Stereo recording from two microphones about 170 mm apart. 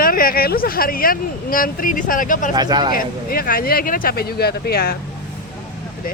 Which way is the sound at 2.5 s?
25° right (ahead or behind).